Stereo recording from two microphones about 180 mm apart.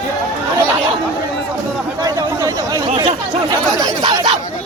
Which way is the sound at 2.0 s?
20° right (ahead or behind).